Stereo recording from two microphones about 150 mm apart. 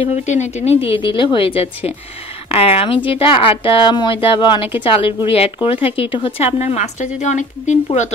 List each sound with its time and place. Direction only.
0.0 s a woman's voice: 50° left (ahead or behind)